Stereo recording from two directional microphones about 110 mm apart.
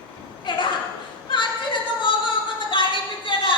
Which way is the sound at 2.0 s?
50° left (ahead or behind).